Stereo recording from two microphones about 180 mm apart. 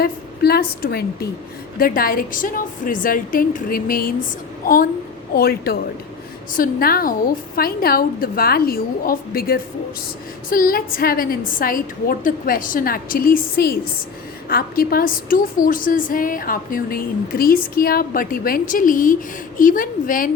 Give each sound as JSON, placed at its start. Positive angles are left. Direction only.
{"t": 0.0, "sound": "a woman's voice", "side_deg": 60}